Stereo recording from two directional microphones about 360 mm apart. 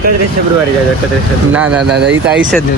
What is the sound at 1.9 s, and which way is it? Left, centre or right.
Speech, right.